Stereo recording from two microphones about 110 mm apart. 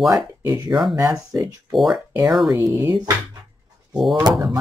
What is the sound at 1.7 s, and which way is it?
Speech, centre (ahead or behind).